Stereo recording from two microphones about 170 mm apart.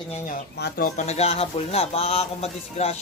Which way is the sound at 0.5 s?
65° left (ahead or behind).